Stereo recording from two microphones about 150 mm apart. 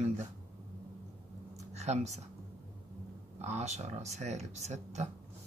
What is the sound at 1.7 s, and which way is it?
Speech, 50° right (ahead or behind).